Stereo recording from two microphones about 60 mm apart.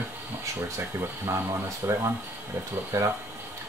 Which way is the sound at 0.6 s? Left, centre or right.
Right.